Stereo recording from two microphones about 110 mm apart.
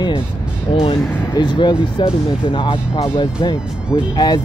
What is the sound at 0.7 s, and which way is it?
Speech, 55° left (ahead or behind).